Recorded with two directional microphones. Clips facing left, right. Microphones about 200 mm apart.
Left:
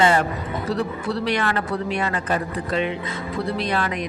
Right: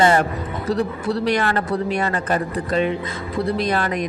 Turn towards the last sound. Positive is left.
turn(degrees=-45)  # may be behind; listen again after turning